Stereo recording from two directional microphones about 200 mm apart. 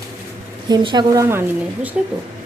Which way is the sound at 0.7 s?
20° right (ahead or behind).